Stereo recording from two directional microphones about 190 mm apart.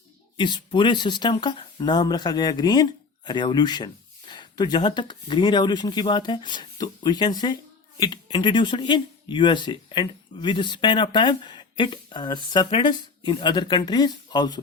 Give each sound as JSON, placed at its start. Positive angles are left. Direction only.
{"t": 0.3, "sound": "speech", "side_deg": 25}